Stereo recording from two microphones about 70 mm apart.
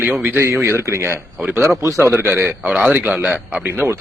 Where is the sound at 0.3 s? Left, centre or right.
Right.